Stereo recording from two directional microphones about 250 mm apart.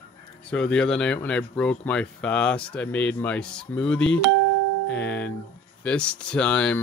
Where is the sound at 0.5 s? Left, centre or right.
Centre.